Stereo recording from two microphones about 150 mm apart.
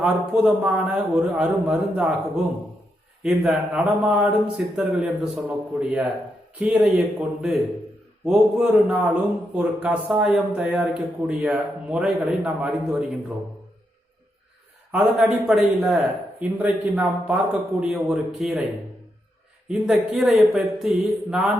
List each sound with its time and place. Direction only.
0.0 s a man's voice: 5° right (ahead or behind)
14.9 s a man's voice: 5° right (ahead or behind)
19.6 s a man's voice: centre (ahead or behind)